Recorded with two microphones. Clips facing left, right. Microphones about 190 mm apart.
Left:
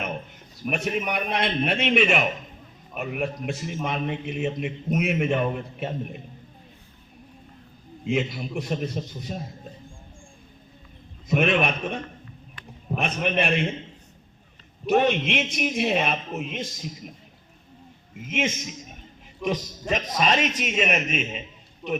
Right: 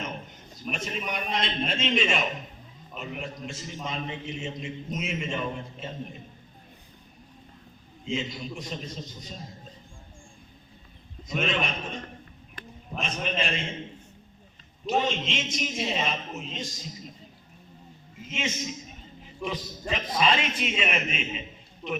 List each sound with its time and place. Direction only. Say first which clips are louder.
0.7 s a man's voice: left 6 dB; 60° left (ahead or behind)
8.0 s a man's voice: left 6 dB; 60° left (ahead or behind)
11.3 s a man's voice: left 7 dB; 60° left (ahead or behind)
13.0 s a man's voice: left 5 dB; 60° left (ahead or behind)
14.8 s a man's voice: left 6 dB; 60° left (ahead or behind)
18.2 s a man's voice: left 6 dB; 55° left (ahead or behind)
19.9 s a man's voice: left 2 dB; 45° left (ahead or behind)
21.8 s a man's voice: left 5 dB; 5° left (ahead or behind)